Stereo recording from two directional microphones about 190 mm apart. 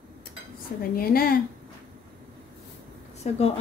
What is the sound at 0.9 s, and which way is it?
Speech, 50° left (ahead or behind).